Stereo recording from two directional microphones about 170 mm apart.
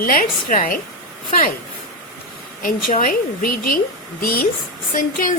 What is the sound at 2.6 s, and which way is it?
Speech, 50° left (ahead or behind).